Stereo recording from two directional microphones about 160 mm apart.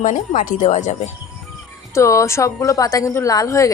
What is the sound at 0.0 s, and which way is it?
Speech, 55° left (ahead or behind).